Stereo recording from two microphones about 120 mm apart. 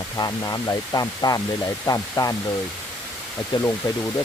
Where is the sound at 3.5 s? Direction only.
40° left (ahead or behind).